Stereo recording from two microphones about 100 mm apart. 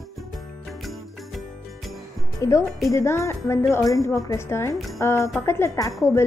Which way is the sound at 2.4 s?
30° left (ahead or behind).